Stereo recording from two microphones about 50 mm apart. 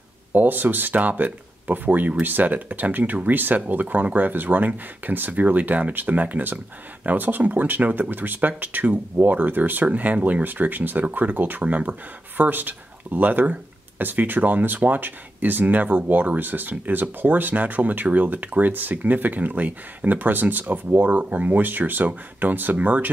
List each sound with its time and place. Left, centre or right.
0.3 s speech: right